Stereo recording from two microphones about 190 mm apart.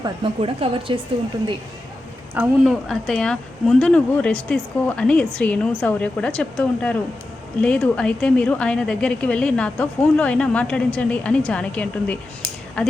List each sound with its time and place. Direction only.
0.0 s a woman's voice: 25° right (ahead or behind)
2.3 s a woman's voice: 5° right (ahead or behind)